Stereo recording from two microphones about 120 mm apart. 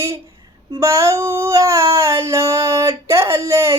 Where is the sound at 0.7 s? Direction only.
25° right (ahead or behind).